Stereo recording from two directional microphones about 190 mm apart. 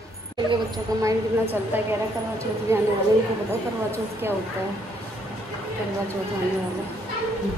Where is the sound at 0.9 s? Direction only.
20° right (ahead or behind).